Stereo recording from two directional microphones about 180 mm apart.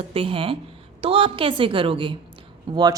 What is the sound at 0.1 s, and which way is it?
A woman's voice, 30° right (ahead or behind).